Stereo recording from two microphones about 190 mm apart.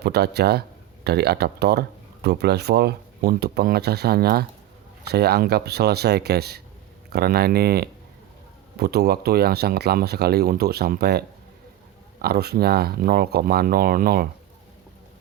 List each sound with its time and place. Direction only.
0.0 s speech: 60° right (ahead or behind)